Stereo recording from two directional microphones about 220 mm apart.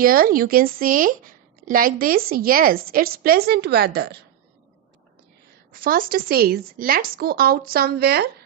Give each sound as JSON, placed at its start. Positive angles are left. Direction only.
{"t": 0.0, "sound": "speech", "side_deg": -40}
{"t": 5.7, "sound": "speech", "side_deg": -40}